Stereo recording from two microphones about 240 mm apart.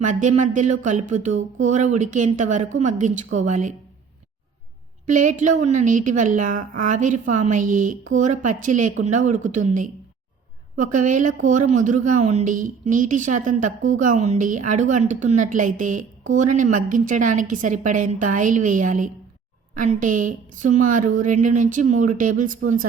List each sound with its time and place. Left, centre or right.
0.0 s a woman's voice: right
5.0 s a woman's voice: right